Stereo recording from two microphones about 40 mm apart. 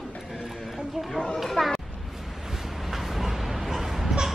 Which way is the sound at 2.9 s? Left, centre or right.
Centre.